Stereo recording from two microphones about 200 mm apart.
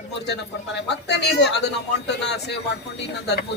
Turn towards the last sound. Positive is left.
turn(degrees=55)  # may be behind; listen again after turning